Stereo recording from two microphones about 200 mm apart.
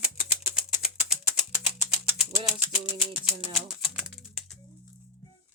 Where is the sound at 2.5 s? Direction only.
5° right (ahead or behind).